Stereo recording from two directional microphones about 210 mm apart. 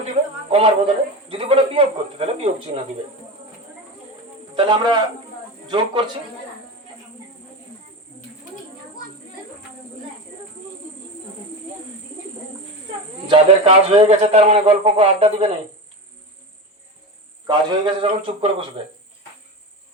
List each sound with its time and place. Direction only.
0.5 s a man's voice: 30° right (ahead or behind)
4.5 s a man's voice: 20° right (ahead or behind)
13.2 s a man's voice: 30° right (ahead or behind)
17.4 s a man's voice: 20° right (ahead or behind)